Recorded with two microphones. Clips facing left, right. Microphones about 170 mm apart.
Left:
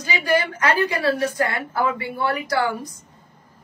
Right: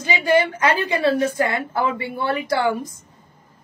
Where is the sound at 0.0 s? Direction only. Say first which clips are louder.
Right 3 dB; 20° right (ahead or behind).